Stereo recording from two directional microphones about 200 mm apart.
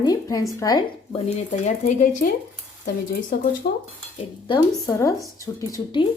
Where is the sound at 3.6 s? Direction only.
55° left (ahead or behind).